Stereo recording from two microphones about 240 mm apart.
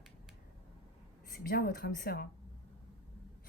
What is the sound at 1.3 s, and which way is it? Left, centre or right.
Speech, left.